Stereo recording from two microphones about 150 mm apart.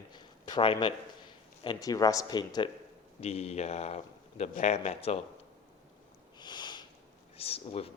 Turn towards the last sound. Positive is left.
turn(degrees=40)  # may be behind; listen again after turning